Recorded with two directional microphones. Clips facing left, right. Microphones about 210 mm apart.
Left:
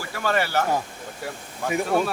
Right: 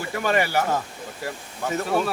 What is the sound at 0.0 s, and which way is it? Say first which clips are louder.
Speech: right 2 dB; 15° right (ahead or behind).